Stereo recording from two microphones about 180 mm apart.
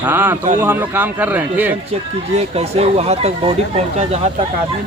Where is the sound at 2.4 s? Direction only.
35° right (ahead or behind).